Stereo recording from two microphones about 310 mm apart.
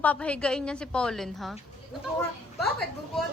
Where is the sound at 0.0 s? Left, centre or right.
Centre.